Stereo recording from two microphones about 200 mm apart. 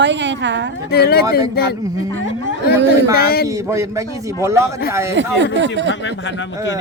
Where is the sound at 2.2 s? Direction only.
70° left (ahead or behind).